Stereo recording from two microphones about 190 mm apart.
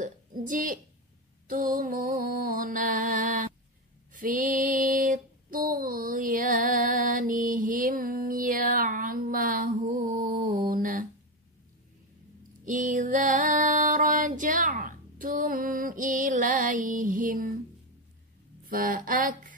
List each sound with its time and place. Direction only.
0.0 s speech: 45° right (ahead or behind)
1.5 s music: 45° right (ahead or behind)
4.1 s child singing: 45° right (ahead or behind)
12.6 s music: 45° right (ahead or behind)
18.7 s music: 45° right (ahead or behind)